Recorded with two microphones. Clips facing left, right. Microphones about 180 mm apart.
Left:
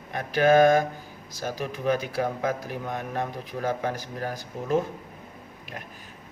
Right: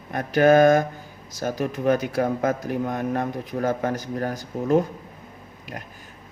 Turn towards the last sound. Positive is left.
turn(degrees=-45)  # may be behind; listen again after turning